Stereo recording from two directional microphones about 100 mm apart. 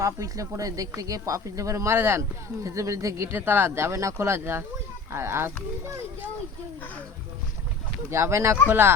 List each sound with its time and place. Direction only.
0.0 s speech: 30° right (ahead or behind)
8.1 s speech: 30° right (ahead or behind)